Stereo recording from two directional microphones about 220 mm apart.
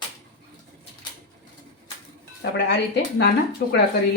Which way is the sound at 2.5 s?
50° left (ahead or behind).